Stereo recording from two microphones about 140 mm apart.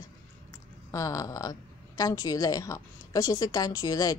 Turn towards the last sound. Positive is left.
turn(degrees=25)  # may be behind; listen again after turning